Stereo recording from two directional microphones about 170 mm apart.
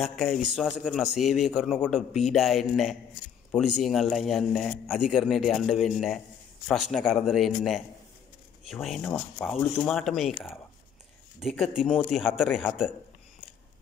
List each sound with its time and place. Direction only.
0.0 s a man's voice: centre (ahead or behind)
11.3 s a man's voice: centre (ahead or behind)